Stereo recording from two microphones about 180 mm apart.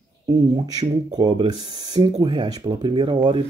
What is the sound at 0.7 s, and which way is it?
Speech, 25° right (ahead or behind).